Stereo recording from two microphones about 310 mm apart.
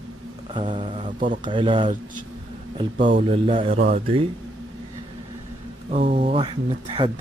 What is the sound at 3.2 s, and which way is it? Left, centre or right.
Speech, centre.